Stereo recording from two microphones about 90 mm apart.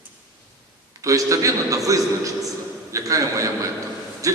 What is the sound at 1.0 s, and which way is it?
A man's voice, 40° right (ahead or behind).